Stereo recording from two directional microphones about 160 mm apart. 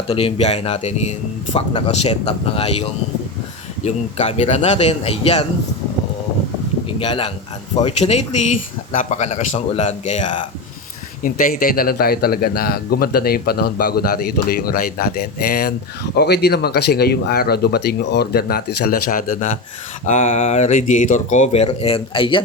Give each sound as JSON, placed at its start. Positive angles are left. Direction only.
{"t": 0.1, "sound": "speech", "side_deg": 40}
{"t": 3.8, "sound": "speech", "side_deg": 40}
{"t": 6.8, "sound": "speech", "side_deg": 30}
{"t": 11.2, "sound": "a man's voice", "side_deg": 60}
{"t": 16.1, "sound": "speech", "side_deg": 90}
{"t": 20.1, "sound": "speech", "side_deg": 40}